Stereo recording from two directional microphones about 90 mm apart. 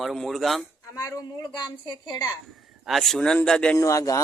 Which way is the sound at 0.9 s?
35° left (ahead or behind).